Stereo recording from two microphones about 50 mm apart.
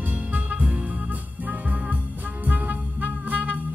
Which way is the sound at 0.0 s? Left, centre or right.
Right.